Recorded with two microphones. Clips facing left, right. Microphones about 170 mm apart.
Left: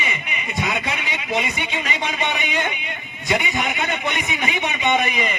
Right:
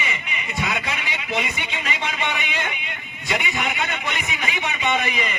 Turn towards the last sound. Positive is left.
turn(degrees=20)  # may be behind; listen again after turning